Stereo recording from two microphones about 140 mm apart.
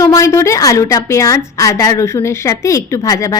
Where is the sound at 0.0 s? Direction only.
20° left (ahead or behind).